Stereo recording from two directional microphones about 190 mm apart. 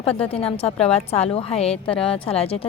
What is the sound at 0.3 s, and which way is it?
A woman's voice, 30° left (ahead or behind).